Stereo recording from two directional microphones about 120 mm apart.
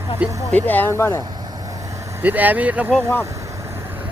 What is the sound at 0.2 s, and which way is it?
Speech, 10° right (ahead or behind).